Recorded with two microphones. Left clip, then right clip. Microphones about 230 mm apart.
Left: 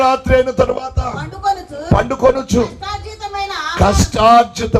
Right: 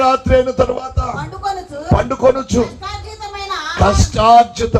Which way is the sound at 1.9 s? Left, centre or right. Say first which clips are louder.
Even; left.